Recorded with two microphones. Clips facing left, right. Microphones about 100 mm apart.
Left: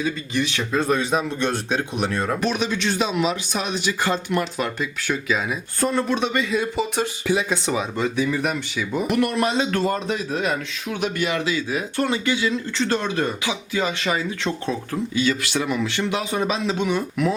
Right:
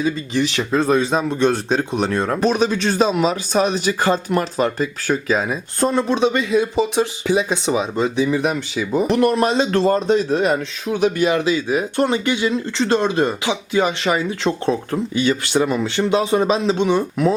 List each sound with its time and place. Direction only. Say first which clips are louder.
0.0 s speech: right 4 dB; 30° right (ahead or behind)
6.1 s speech: right 5 dB; 25° right (ahead or behind)
8.7 s speech: right 5 dB; 35° right (ahead or behind)